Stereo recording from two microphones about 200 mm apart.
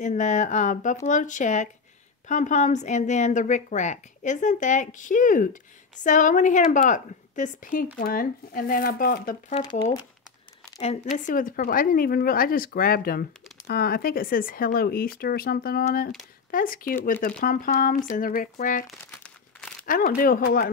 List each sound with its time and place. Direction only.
0.0 s a woman's voice: 35° left (ahead or behind)
11.1 s a woman's voice: 40° left (ahead or behind)
18.9 s crumpling: 5° left (ahead or behind)
19.9 s a woman's voice: 45° left (ahead or behind)